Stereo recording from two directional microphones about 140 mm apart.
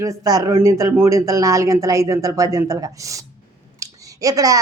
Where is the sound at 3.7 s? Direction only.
25° right (ahead or behind).